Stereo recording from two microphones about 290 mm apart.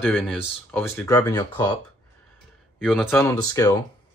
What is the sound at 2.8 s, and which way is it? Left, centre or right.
Speech, centre.